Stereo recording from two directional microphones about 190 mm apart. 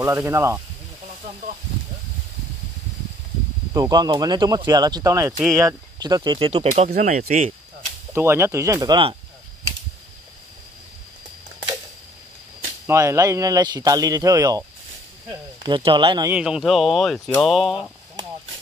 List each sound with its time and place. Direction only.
0.0 s speech: 15° right (ahead or behind)
3.7 s speech: 20° right (ahead or behind)
6.9 s speech: 45° right (ahead or behind)
8.1 s speech: 10° right (ahead or behind)
12.8 s speech: 15° right (ahead or behind)
15.6 s speech: 25° right (ahead or behind)
16.3 s speech: 5° right (ahead or behind)